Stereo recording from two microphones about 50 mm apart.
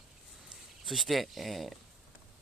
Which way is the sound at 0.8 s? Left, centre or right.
Centre.